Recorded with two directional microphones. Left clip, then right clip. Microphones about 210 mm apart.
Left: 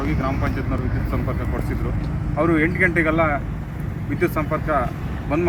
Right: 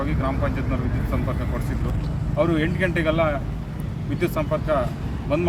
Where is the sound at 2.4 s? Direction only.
30° right (ahead or behind).